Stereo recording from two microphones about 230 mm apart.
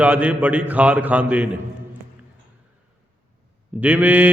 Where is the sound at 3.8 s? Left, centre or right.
Centre.